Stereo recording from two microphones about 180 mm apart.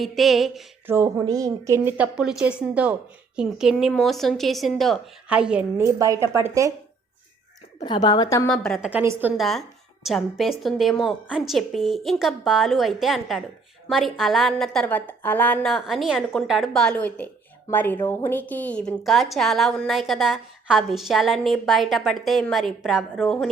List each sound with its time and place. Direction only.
0.0 s a woman's voice: centre (ahead or behind)
0.9 s a woman's voice: 15° right (ahead or behind)
7.9 s a woman's voice: 25° left (ahead or behind)
8.4 s a woman's voice: 5° left (ahead or behind)
8.9 s a woman's voice: 10° right (ahead or behind)